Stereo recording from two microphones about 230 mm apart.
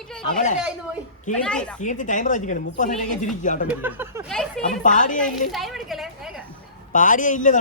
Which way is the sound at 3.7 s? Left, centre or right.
Centre.